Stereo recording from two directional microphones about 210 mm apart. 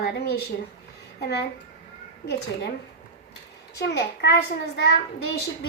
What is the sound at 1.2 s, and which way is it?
Speech, 50° left (ahead or behind).